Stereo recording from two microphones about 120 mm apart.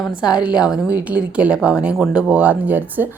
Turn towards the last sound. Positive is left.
turn(degrees=-15)  # may be behind; listen again after turning